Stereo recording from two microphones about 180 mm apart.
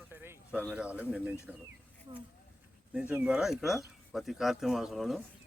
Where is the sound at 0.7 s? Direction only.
10° right (ahead or behind).